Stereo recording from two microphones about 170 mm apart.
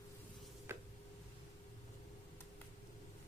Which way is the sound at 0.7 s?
15° right (ahead or behind).